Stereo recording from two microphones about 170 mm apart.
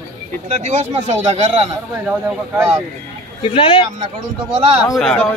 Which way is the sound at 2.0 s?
10° right (ahead or behind).